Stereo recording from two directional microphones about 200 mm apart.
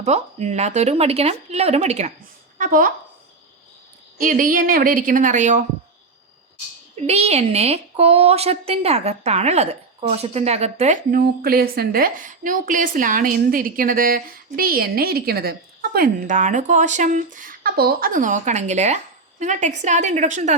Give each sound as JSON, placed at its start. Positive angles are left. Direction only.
{"t": 0.0, "sound": "speech", "side_deg": -35}
{"t": 2.6, "sound": "a woman's voice", "side_deg": -40}
{"t": 4.2, "sound": "a woman's voice", "side_deg": -40}
{"t": 7.1, "sound": "speech", "side_deg": -30}
{"t": 11.1, "sound": "a woman's voice", "side_deg": -50}